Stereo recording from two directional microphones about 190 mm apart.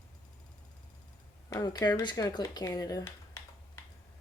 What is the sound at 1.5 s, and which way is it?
Speech, 20° left (ahead or behind).